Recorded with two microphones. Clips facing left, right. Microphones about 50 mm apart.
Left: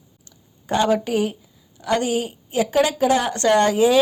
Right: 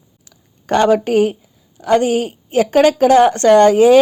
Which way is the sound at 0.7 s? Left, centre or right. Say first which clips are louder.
Right 6 dB; right.